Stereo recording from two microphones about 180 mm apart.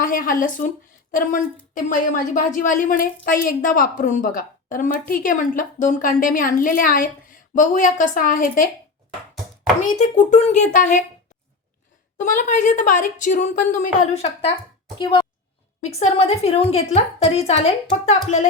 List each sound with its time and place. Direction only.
0.0 s a woman's voice: 50° left (ahead or behind)
9.8 s a woman's voice: 40° left (ahead or behind)
12.1 s a woman's voice: 45° left (ahead or behind)
14.9 s speech: 25° left (ahead or behind)
15.8 s a woman's voice: 35° left (ahead or behind)